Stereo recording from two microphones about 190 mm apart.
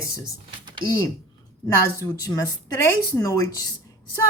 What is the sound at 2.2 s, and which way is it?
Speech, 20° left (ahead or behind).